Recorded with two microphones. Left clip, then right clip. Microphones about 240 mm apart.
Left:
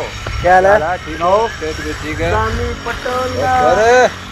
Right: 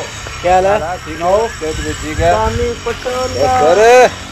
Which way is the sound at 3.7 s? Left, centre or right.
Right.